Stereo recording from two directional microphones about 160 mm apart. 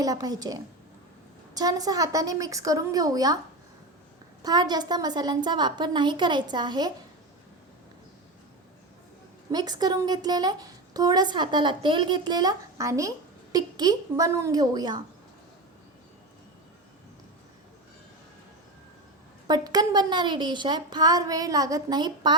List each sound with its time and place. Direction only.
0.0 s a woman's voice: 25° right (ahead or behind)
4.4 s a woman's voice: 25° right (ahead or behind)
9.5 s a woman's voice: 25° right (ahead or behind)
19.5 s a woman's voice: 25° right (ahead or behind)